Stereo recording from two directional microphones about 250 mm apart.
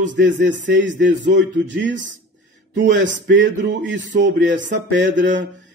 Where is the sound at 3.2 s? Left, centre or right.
Right.